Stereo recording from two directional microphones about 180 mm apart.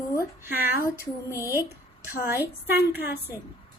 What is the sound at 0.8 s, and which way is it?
Female singing, 15° left (ahead or behind).